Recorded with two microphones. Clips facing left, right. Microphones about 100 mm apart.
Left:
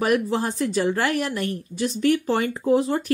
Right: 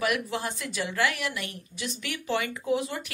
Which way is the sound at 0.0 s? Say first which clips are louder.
Left 7 dB; 35° left (ahead or behind).